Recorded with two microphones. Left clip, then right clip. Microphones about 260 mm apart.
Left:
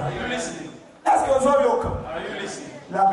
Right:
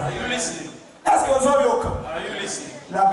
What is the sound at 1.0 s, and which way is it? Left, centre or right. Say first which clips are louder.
Bow-wow: right 1 dB; centre.